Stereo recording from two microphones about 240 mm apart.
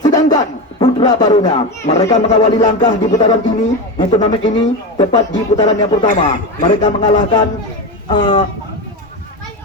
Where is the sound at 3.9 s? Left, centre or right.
Left.